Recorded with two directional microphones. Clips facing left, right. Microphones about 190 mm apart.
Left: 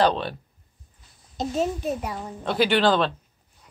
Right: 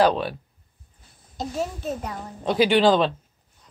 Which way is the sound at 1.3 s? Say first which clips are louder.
Left 3 dB; 20° left (ahead or behind).